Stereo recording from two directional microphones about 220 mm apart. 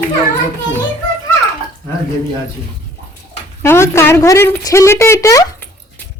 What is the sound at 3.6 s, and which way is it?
Speech, 10° left (ahead or behind).